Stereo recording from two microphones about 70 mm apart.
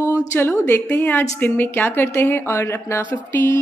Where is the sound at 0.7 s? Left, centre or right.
Left.